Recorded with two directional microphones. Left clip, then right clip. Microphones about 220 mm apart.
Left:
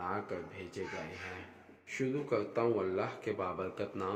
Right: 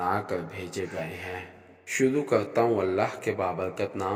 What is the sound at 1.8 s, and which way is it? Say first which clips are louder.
Speech: right 11 dB; 35° right (ahead or behind).